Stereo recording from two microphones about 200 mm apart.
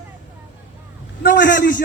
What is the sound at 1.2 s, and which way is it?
Speech, 50° left (ahead or behind).